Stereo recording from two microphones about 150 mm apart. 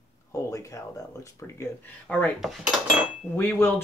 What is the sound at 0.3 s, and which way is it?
Speech, 20° left (ahead or behind).